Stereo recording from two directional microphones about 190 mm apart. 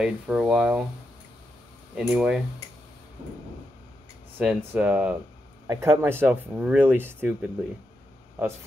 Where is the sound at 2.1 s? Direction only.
5° right (ahead or behind).